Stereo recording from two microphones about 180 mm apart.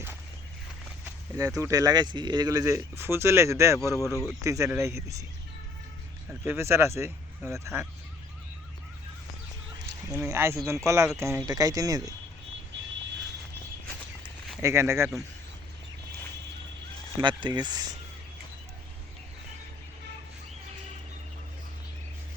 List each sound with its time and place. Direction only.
1.4 s speech: 15° right (ahead or behind)
6.4 s speech: 15° right (ahead or behind)
10.1 s speech: 15° right (ahead or behind)
14.6 s speech: 15° right (ahead or behind)
17.2 s speech: 25° right (ahead or behind)